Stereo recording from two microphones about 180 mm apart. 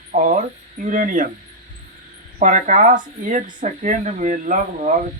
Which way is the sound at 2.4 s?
45° right (ahead or behind).